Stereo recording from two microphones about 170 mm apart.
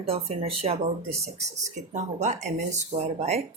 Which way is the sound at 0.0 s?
35° right (ahead or behind).